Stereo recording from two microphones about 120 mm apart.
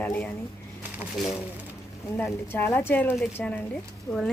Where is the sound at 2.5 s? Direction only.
15° left (ahead or behind).